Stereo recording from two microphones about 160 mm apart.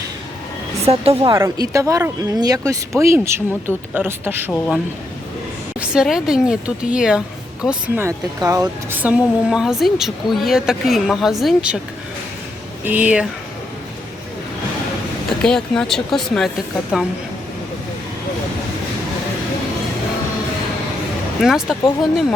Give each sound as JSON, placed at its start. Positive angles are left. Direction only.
{"t": 0.9, "sound": "speech", "side_deg": -40}
{"t": 1.3, "sound": "speech", "side_deg": -20}
{"t": 5.8, "sound": "speech", "side_deg": -5}
{"t": 8.0, "sound": "speech", "side_deg": -20}
{"t": 12.8, "sound": "speech", "side_deg": -10}
{"t": 15.3, "sound": "speech", "side_deg": 5}
{"t": 21.4, "sound": "speech", "side_deg": 0}